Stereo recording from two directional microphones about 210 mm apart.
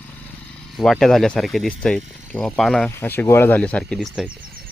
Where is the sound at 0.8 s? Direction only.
Centre (ahead or behind).